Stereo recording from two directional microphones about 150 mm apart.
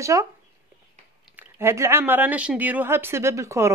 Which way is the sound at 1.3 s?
15° right (ahead or behind).